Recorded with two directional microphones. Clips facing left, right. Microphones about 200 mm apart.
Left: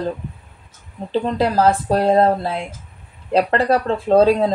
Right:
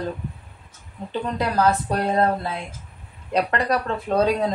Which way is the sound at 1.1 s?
30° left (ahead or behind).